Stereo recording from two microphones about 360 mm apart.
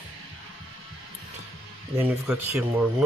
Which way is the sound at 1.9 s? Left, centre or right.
Centre.